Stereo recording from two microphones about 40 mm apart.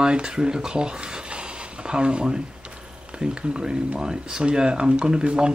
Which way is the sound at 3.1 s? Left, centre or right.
Right.